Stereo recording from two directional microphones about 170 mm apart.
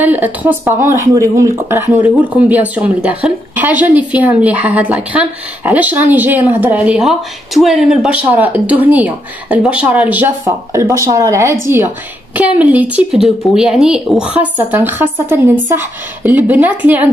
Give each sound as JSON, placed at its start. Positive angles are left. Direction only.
{"t": 0.0, "sound": "speech", "side_deg": -10}